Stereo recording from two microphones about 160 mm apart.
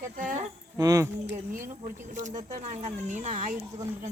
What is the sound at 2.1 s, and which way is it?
Speech, 50° right (ahead or behind).